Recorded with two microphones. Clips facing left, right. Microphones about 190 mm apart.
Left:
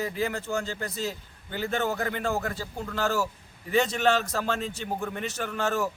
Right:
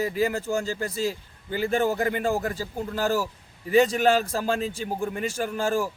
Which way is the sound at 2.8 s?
35° right (ahead or behind).